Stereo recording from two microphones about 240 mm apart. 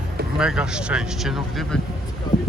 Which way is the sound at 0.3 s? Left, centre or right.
Centre.